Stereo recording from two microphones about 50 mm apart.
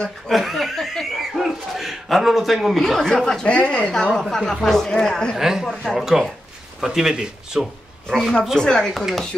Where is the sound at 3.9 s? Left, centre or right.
Centre.